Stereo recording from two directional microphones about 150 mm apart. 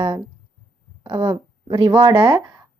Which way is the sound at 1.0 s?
30° right (ahead or behind).